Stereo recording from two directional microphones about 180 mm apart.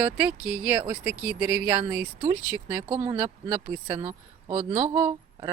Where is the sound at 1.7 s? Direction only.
25° right (ahead or behind).